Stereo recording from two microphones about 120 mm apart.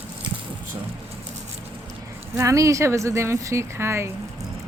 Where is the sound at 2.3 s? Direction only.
25° right (ahead or behind).